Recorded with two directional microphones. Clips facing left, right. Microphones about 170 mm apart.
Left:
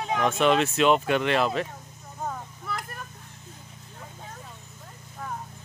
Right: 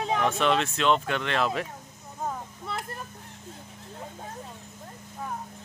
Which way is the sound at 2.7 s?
25° right (ahead or behind).